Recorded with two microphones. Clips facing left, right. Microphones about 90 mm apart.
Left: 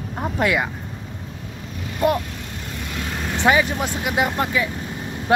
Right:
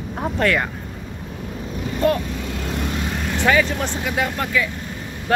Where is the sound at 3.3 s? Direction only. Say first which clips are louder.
Even; 20° left (ahead or behind).